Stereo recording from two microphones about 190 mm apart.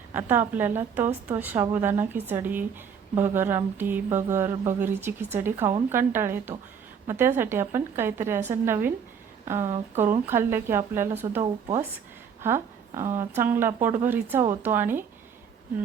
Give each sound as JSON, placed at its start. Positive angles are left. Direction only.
{"t": 0.1, "sound": "speech", "side_deg": -10}
{"t": 9.6, "sound": "speech", "side_deg": -35}
{"t": 10.0, "sound": "speech", "side_deg": -15}
{"t": 12.4, "sound": "a sound", "side_deg": -15}
{"t": 13.1, "sound": "speech", "side_deg": -10}